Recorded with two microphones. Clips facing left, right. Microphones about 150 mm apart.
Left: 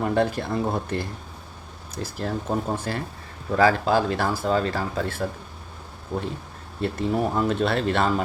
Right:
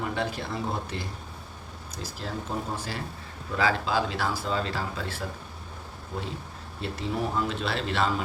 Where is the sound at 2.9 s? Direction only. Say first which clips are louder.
Left 6 dB; 50° left (ahead or behind).